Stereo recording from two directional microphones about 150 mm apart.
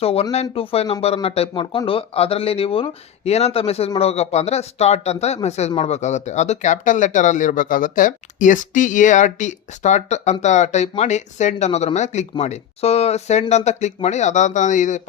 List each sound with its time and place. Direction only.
0.0 s speech: 40° left (ahead or behind)